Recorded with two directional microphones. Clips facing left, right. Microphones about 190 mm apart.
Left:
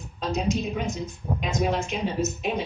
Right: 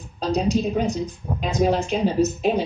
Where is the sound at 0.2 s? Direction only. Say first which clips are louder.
Right 5 dB; 35° right (ahead or behind).